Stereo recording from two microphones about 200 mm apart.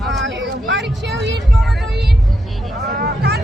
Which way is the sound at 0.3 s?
65° right (ahead or behind).